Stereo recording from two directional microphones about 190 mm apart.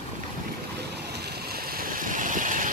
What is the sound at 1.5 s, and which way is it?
Vehicle, 50° right (ahead or behind).